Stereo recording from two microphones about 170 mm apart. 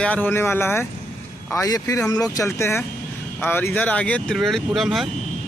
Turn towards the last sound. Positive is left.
turn(degrees=0)  # may be behind; listen again after turning